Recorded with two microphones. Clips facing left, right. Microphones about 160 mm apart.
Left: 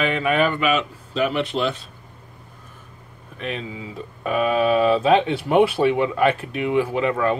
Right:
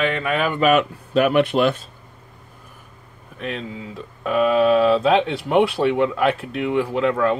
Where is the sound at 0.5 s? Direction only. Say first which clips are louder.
Right 5 dB; 55° right (ahead or behind).